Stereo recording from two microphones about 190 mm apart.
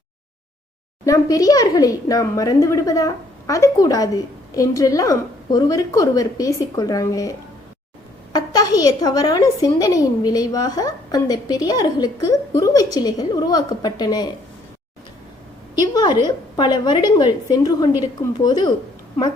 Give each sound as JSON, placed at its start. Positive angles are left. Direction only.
{"t": 1.0, "sound": "a woman's voice", "side_deg": 20}
{"t": 15.9, "sound": "a woman's voice", "side_deg": 20}